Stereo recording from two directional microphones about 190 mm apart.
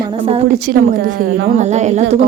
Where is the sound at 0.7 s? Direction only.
50° right (ahead or behind).